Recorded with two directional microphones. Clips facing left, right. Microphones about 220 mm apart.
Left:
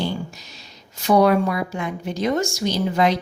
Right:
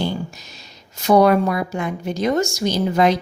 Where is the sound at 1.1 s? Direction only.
45° right (ahead or behind).